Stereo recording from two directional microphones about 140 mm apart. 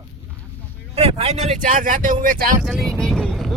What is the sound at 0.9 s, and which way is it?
Speech, 50° right (ahead or behind).